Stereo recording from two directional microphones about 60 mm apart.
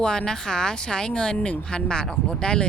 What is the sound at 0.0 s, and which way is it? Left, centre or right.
Speech, centre.